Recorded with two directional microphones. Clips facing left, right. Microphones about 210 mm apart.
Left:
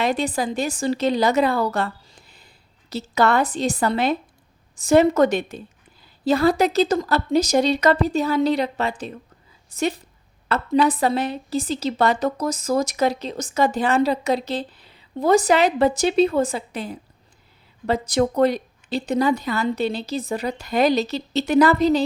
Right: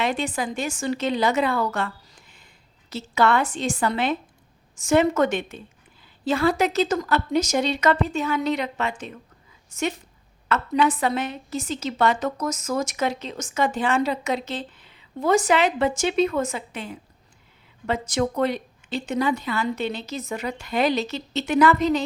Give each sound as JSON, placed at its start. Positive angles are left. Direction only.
{"t": 0.0, "sound": "a woman's voice", "side_deg": 35}